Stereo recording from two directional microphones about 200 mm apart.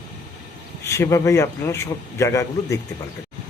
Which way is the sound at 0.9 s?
15° left (ahead or behind).